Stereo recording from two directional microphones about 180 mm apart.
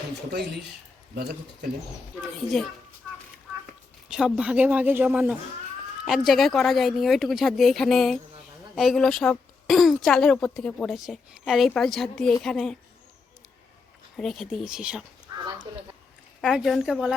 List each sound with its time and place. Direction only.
1.1 s speech: 60° right (ahead or behind)
4.1 s speech: 5° right (ahead or behind)
14.2 s speech: centre (ahead or behind)
15.3 s a sound: 20° right (ahead or behind)
16.4 s speech: centre (ahead or behind)